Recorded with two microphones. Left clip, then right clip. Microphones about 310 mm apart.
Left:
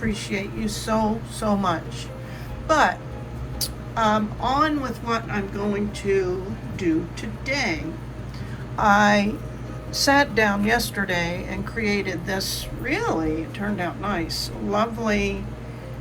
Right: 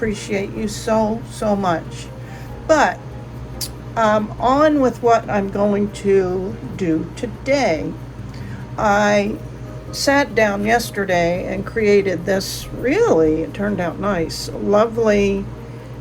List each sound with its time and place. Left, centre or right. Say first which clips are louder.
0.0 s a woman's voice: right 6 dB; centre
8.7 s a woman's voice: right 2 dB; centre
11.3 s speech: right 8 dB; left
11.6 s speech: right 10 dB; centre